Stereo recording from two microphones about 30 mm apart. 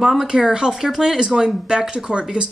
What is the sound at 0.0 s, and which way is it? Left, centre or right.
Speech, centre.